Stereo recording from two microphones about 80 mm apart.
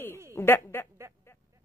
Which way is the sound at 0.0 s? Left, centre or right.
Left.